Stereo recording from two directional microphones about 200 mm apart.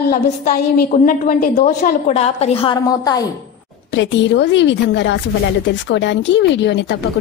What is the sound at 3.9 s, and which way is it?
Speech, 65° left (ahead or behind).